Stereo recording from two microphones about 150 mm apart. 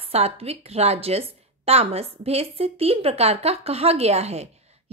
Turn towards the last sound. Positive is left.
turn(degrees=-45)  # may be behind; listen again after turning